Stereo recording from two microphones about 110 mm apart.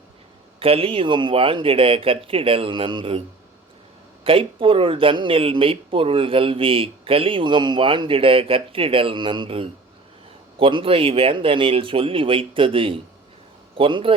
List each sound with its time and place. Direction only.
0.6 s speech: 60° right (ahead or behind)